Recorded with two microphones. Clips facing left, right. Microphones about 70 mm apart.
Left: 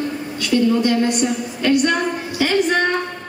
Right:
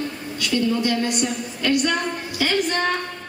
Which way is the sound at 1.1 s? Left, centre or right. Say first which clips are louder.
Left 4 dB; centre.